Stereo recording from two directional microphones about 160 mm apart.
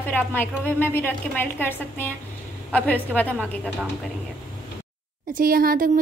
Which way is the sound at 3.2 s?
10° left (ahead or behind).